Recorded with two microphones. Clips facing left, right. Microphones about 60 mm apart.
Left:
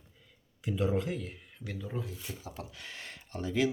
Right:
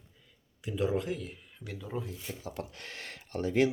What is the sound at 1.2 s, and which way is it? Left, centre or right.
Speech, centre.